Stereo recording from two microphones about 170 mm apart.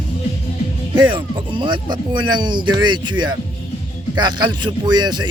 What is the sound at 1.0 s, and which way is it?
Speech, 30° right (ahead or behind).